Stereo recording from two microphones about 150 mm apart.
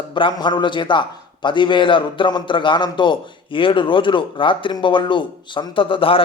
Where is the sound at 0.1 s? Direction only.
35° left (ahead or behind).